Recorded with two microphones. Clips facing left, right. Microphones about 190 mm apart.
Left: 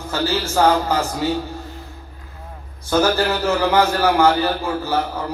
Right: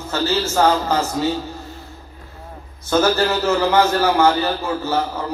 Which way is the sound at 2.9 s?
10° left (ahead or behind).